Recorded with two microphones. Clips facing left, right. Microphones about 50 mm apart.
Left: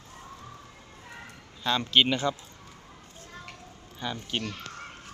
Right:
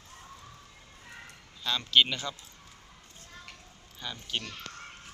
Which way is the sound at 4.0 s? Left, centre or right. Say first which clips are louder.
Left 4 dB; centre.